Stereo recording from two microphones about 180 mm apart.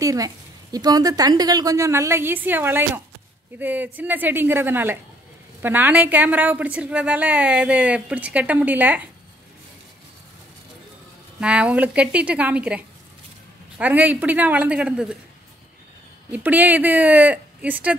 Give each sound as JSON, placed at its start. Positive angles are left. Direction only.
{"t": 0.0, "sound": "a woman's voice", "side_deg": -20}
{"t": 11.3, "sound": "a woman's voice", "side_deg": -5}
{"t": 16.3, "sound": "a woman's voice", "side_deg": -10}